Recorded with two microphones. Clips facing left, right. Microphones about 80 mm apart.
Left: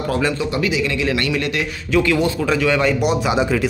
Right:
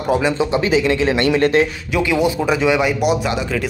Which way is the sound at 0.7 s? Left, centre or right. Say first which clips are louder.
Right 4 dB; right.